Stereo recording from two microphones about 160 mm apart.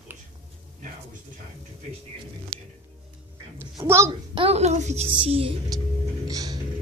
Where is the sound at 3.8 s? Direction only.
15° right (ahead or behind).